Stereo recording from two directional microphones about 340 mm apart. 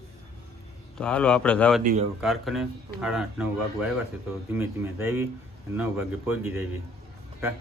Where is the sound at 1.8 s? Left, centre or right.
Right.